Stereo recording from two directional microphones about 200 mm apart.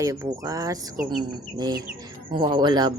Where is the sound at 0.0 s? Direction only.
15° right (ahead or behind).